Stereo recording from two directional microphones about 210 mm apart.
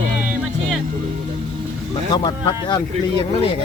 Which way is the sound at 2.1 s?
20° left (ahead or behind).